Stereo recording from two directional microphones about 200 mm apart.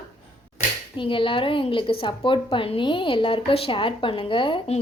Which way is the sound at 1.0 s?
25° left (ahead or behind).